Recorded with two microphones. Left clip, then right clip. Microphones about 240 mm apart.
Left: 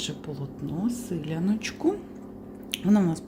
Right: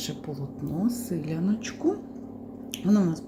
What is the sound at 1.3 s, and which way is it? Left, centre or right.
Speech, centre.